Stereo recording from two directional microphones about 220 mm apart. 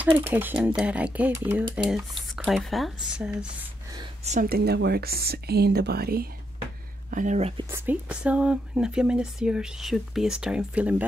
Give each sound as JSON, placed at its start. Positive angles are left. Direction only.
{"t": 0.0, "sound": "speech", "side_deg": -10}
{"t": 3.9, "sound": "speech", "side_deg": -25}
{"t": 7.7, "sound": "speech", "side_deg": -10}